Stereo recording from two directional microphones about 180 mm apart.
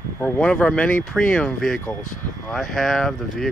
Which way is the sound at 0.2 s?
10° left (ahead or behind).